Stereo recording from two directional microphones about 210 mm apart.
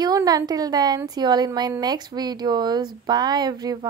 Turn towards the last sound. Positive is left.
turn(degrees=-20)  # may be behind; listen again after turning